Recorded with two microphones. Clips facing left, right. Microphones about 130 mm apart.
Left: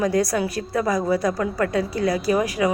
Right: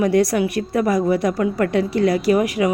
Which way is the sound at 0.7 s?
25° right (ahead or behind).